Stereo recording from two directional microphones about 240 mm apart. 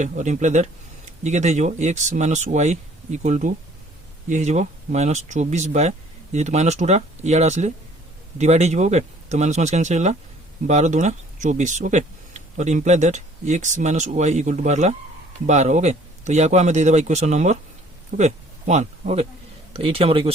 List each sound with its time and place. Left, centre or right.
0.0 s speech: right